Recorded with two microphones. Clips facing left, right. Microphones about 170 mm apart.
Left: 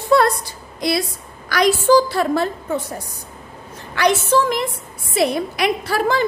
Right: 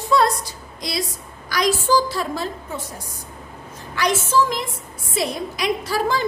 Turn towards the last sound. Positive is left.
turn(degrees=60)  # may be behind; listen again after turning